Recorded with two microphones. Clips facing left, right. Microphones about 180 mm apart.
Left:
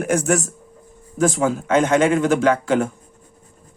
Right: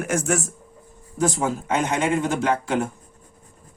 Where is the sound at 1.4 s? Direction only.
90° left.